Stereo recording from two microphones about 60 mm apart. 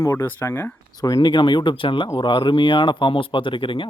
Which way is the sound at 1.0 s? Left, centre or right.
Left.